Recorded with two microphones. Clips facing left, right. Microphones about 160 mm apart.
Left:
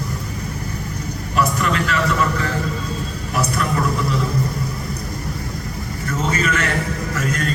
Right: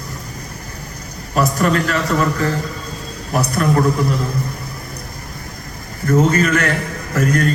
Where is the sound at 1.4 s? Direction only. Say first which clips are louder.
Right 3 dB; 40° right (ahead or behind).